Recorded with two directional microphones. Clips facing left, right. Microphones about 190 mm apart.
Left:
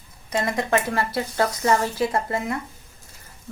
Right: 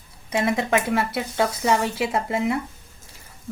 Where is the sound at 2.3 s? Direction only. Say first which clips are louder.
Right 3 dB; 20° right (ahead or behind).